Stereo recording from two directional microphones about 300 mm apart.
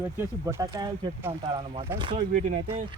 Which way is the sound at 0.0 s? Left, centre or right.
Centre.